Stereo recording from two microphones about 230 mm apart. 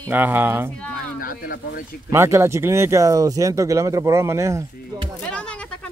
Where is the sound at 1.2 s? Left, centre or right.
Left.